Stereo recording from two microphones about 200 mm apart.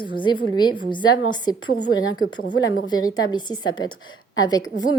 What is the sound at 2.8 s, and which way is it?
Speech, 20° left (ahead or behind).